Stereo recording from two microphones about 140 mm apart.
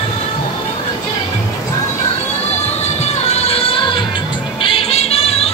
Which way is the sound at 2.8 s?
50° left (ahead or behind).